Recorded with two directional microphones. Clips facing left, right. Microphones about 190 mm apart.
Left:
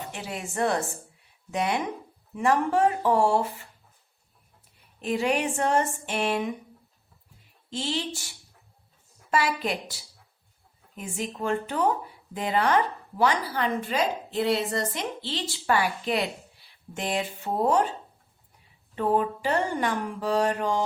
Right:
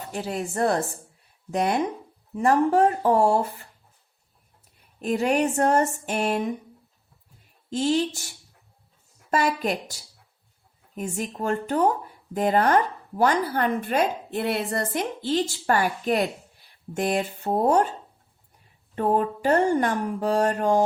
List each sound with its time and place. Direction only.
0.1 s speech: 40° right (ahead or behind)
4.9 s speech: 45° right (ahead or behind)
7.7 s speech: 45° right (ahead or behind)
9.3 s speech: 45° right (ahead or behind)
18.9 s speech: 45° right (ahead or behind)